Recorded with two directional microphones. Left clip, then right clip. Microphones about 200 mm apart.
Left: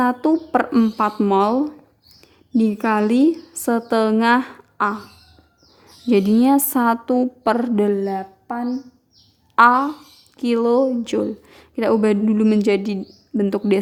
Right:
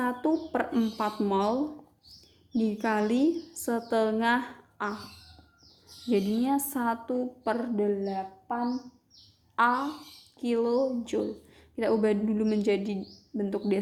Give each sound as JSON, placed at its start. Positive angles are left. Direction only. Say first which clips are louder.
{"t": 0.0, "sound": "a woman's voice", "louder": "left 10 dB", "side_deg": 40}
{"t": 2.6, "sound": "a woman's voice", "louder": "left 9 dB", "side_deg": 40}
{"t": 6.1, "sound": "speech", "louder": "left 11 dB", "side_deg": 45}
{"t": 9.6, "sound": "speech", "louder": "left 12 dB", "side_deg": 45}